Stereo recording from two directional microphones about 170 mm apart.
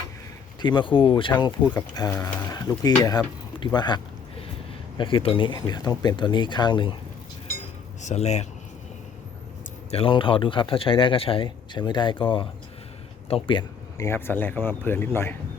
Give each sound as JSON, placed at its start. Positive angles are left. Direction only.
{"t": 0.6, "sound": "a man's voice", "side_deg": 25}
{"t": 3.6, "sound": "a sound", "side_deg": 25}
{"t": 4.9, "sound": "a man's voice", "side_deg": 30}
{"t": 8.0, "sound": "speech", "side_deg": 40}
{"t": 9.9, "sound": "a man's voice", "side_deg": 30}
{"t": 14.0, "sound": "a man's voice", "side_deg": 15}